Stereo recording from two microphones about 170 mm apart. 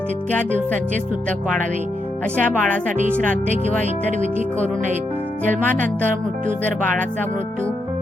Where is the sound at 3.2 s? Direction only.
50° right (ahead or behind).